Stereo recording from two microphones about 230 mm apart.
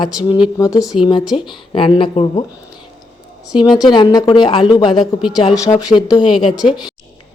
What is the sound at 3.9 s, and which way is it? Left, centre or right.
A woman's voice, centre.